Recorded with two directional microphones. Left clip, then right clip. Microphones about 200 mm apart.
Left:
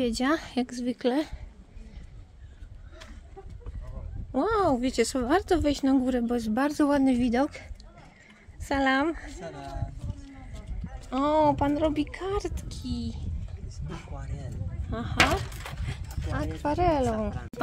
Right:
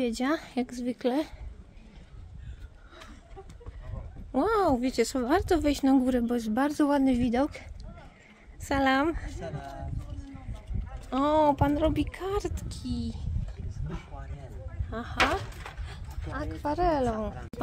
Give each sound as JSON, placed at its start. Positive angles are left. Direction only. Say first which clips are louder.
{"t": 0.0, "sound": "a woman's voice", "louder": "left 2 dB", "side_deg": 5}
{"t": 4.3, "sound": "speech", "louder": "even", "side_deg": 0}
{"t": 8.6, "sound": "speech", "louder": "even", "side_deg": 0}
{"t": 9.4, "sound": "speech", "louder": "even", "side_deg": -15}
{"t": 11.1, "sound": "speech", "louder": "even", "side_deg": -5}
{"t": 13.7, "sound": "a sound", "louder": "left 3 dB", "side_deg": 50}
{"t": 14.9, "sound": "speech", "louder": "left 1 dB", "side_deg": 0}
{"t": 15.1, "sound": "speech", "louder": "left 2 dB", "side_deg": 50}
{"t": 16.3, "sound": "a woman's voice", "louder": "left 2 dB", "side_deg": 10}